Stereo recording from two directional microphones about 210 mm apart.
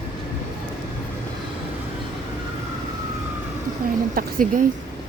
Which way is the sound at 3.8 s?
40° right (ahead or behind).